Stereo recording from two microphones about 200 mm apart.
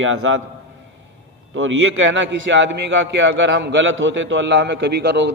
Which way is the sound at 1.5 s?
80° right.